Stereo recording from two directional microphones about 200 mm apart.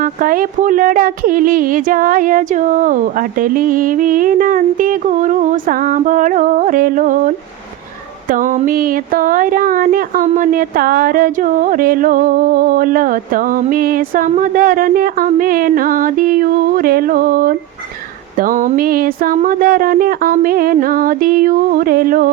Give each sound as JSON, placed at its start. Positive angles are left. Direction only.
{"t": 0.0, "sound": "speech", "side_deg": -45}